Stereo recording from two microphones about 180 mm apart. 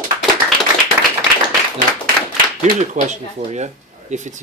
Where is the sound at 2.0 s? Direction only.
45° right (ahead or behind).